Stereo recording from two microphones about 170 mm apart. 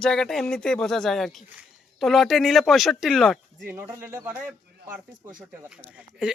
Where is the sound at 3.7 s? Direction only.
15° right (ahead or behind).